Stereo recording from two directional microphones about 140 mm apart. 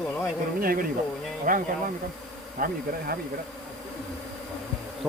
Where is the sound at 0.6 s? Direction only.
90° right.